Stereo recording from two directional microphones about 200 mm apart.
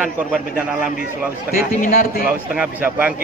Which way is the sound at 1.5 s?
45° left (ahead or behind).